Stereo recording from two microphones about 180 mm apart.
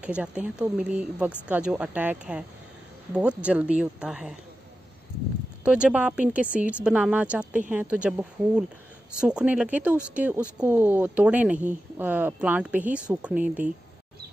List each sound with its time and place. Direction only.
0.0 s speech: 5° right (ahead or behind)
5.6 s speech: 5° right (ahead or behind)